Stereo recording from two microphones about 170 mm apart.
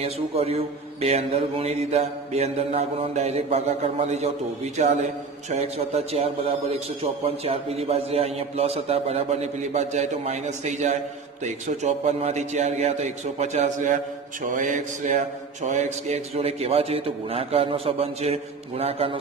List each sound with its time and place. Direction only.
0.0 s a man's voice: 35° right (ahead or behind)
5.5 s a man's voice: 40° right (ahead or behind)